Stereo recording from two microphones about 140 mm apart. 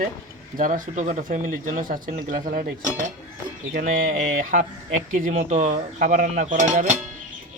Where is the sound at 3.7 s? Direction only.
80° right; by 6.9 s 60° right (ahead or behind).